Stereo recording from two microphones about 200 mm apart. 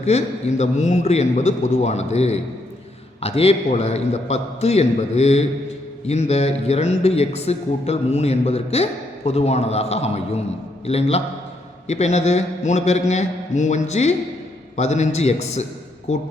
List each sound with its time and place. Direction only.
0.0 s speech: 35° left (ahead or behind)